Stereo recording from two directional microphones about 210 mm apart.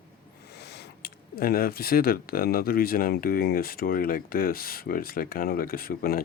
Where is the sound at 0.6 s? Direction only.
50° left (ahead or behind).